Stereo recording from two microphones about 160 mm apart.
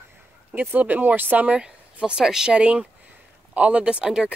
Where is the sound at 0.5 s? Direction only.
10° right (ahead or behind).